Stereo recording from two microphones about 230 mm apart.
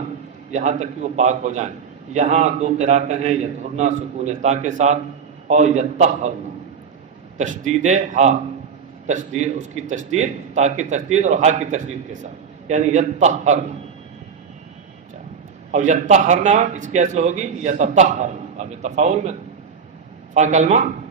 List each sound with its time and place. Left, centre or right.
0.5 s a man's voice: right
7.3 s a man's voice: right
15.7 s a man's voice: right